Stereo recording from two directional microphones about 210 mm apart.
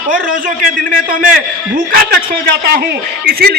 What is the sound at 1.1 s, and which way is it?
Speech, 40° right (ahead or behind).